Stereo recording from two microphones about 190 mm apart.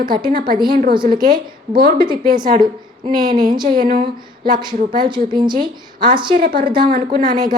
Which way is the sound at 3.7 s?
50° right (ahead or behind).